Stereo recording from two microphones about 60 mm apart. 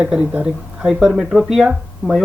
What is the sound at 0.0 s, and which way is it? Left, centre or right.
Speech, centre.